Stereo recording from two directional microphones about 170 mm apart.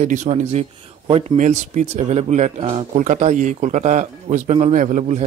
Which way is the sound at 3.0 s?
45° right (ahead or behind).